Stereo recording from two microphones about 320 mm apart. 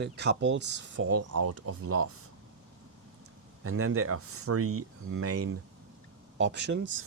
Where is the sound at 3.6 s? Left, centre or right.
Right.